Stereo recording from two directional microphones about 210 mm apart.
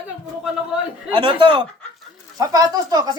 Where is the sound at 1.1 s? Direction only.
20° right (ahead or behind).